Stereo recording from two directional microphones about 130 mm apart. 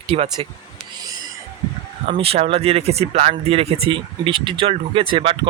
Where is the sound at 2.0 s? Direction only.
50° right (ahead or behind).